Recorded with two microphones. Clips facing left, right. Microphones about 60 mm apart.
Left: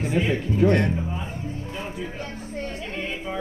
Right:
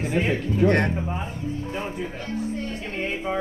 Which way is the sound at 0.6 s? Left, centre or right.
Right.